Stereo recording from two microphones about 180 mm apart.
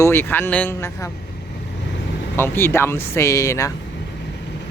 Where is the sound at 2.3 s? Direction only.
10° left (ahead or behind).